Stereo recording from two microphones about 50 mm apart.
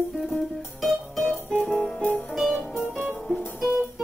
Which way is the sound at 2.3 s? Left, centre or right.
Centre.